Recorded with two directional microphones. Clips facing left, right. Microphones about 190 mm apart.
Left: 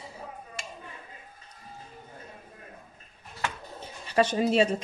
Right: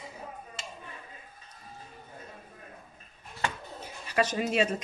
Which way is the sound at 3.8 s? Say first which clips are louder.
Left 4 dB; 30° left (ahead or behind).